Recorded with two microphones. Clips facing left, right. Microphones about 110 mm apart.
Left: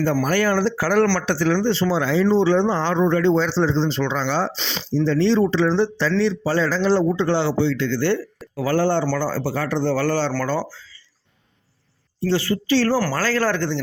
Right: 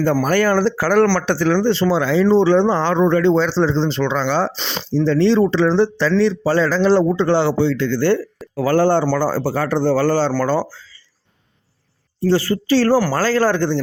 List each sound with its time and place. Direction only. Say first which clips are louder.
0.0 s speech: right 3 dB; 55° right (ahead or behind); by 2.2 s 80° right
2.2 s speech: right 4 dB; 55° right (ahead or behind)
4.5 s speech: right 3 dB; 45° right (ahead or behind)
12.3 s speech: right 3 dB; 40° right (ahead or behind)
13.1 s speech: right 4 dB; 30° right (ahead or behind)